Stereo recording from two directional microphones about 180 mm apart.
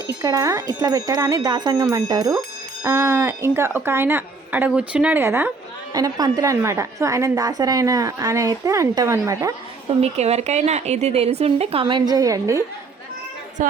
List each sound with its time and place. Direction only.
0.1 s a woman's voice: 20° right (ahead or behind)
10.0 s speech: 35° right (ahead or behind); by 12.6 s 15° right (ahead or behind)
13.6 s a woman's voice: 45° right (ahead or behind)